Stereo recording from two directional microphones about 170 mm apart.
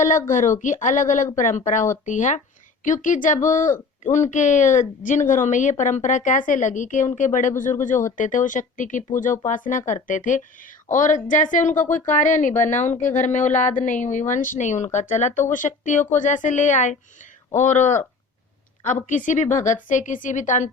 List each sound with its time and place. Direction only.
0.3 s a woman's voice: 50° left (ahead or behind)